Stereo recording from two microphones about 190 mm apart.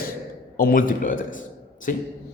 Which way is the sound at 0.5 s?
50° left (ahead or behind).